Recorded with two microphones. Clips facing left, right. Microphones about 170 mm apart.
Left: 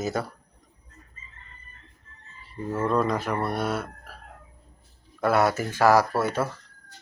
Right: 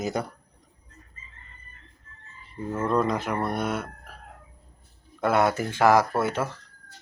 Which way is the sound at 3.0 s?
15° right (ahead or behind).